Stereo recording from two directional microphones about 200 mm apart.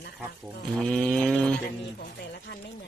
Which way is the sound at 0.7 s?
5° left (ahead or behind).